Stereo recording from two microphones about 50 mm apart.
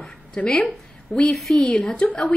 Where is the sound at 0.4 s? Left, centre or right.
Left.